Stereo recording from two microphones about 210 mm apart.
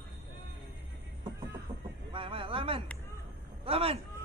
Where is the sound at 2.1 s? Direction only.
25° right (ahead or behind).